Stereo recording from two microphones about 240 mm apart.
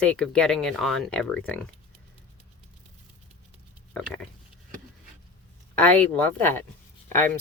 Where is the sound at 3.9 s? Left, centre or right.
Centre.